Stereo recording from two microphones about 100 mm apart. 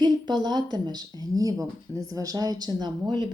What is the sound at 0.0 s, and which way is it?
A woman's voice, 45° right (ahead or behind).